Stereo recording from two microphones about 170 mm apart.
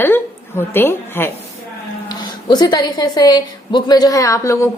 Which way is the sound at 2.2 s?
25° left (ahead or behind).